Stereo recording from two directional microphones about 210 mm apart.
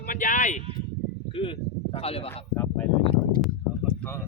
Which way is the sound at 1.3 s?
25° left (ahead or behind).